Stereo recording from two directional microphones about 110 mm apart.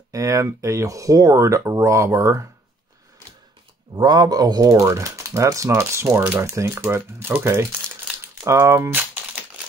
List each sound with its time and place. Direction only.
0.1 s speech: 30° right (ahead or behind)
3.9 s speech: 40° right (ahead or behind); by 9.4 s 20° right (ahead or behind)